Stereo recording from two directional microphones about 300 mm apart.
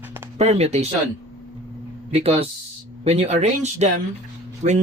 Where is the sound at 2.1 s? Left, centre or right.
Centre.